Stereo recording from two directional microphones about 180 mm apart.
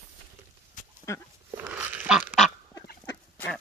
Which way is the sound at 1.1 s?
15° left (ahead or behind).